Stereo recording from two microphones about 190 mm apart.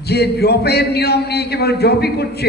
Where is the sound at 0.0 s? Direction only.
60° left (ahead or behind).